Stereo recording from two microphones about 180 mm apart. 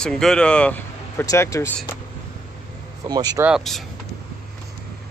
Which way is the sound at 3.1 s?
20° right (ahead or behind).